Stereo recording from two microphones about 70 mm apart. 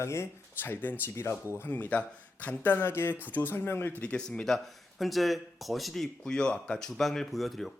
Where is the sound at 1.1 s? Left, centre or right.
Left.